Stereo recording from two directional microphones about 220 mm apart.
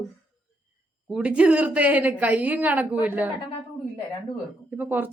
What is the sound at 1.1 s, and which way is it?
Speech, 5° right (ahead or behind).